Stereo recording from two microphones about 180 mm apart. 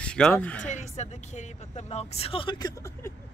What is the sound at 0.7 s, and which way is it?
Speech, 40° left (ahead or behind).